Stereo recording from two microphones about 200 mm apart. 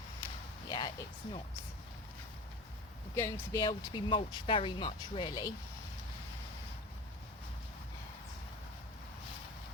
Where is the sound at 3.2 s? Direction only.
20° left (ahead or behind).